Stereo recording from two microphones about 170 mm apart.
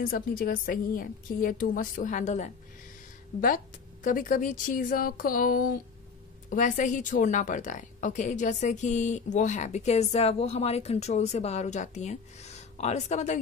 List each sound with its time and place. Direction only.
0.0 s a woman's voice: 55° left (ahead or behind)
3.3 s a woman's voice: 55° left (ahead or behind)